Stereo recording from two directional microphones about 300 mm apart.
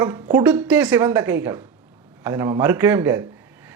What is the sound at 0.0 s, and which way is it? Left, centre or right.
Speech, centre.